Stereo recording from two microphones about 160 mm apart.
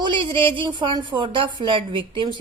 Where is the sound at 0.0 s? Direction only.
30° right (ahead or behind).